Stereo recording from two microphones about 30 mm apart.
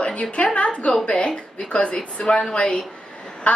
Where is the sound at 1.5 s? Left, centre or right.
Left.